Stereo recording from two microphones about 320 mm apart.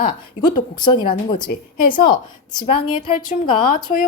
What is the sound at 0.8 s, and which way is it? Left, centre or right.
Speech, centre.